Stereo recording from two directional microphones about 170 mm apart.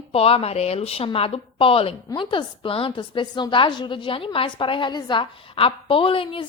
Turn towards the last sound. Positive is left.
turn(degrees=30)  # may be behind; listen again after turning